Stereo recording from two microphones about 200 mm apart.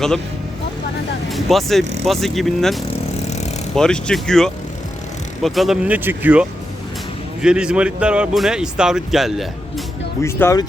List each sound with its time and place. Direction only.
1.3 s speech: centre (ahead or behind)
3.2 s vehicle: 35° left (ahead or behind)
3.8 s speech: 5° left (ahead or behind)
10.2 s speech: 10° left (ahead or behind)